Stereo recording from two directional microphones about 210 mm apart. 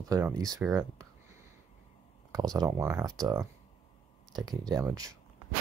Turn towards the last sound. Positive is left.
turn(degrees=-15)  # may be behind; listen again after turning